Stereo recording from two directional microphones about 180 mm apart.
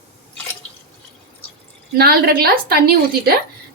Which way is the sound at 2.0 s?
60° right (ahead or behind).